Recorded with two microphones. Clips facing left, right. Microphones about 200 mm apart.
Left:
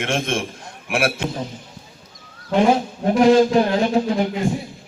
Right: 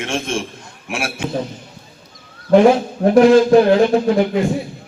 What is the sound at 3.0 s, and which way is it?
Speech, 80° right.